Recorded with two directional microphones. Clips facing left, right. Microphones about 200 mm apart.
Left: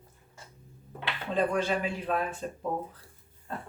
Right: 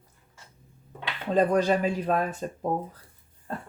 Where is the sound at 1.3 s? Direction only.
40° right (ahead or behind).